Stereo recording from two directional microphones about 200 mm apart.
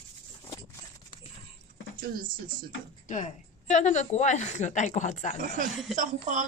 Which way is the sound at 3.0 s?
35° left (ahead or behind).